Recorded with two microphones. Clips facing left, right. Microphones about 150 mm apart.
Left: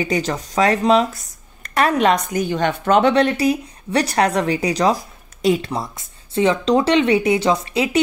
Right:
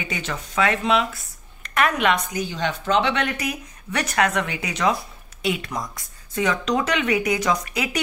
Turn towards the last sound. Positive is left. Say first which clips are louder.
# left 5 dB
turn(degrees=25)  # may be behind; listen again after turning